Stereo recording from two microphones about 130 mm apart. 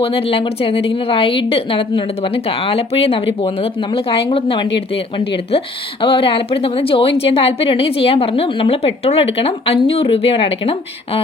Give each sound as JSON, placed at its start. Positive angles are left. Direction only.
{"t": 0.0, "sound": "speech", "side_deg": 45}